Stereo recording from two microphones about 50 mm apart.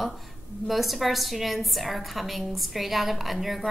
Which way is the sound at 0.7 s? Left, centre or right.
Centre.